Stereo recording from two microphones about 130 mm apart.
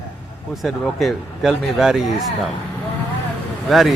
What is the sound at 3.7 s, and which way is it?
Speech, centre (ahead or behind).